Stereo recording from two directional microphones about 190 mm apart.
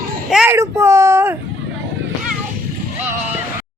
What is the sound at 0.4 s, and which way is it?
Speech, 15° right (ahead or behind).